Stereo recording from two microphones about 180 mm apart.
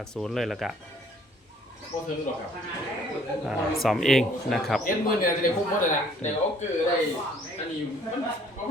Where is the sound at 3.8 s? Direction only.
Centre (ahead or behind).